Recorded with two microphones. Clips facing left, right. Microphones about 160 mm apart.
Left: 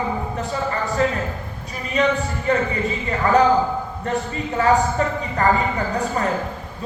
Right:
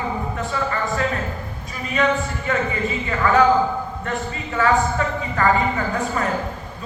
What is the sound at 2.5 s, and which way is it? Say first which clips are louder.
Speech: left 2 dB; 35° left (ahead or behind).